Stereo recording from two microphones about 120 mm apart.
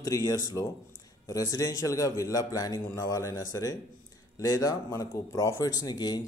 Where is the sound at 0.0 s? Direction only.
30° left (ahead or behind).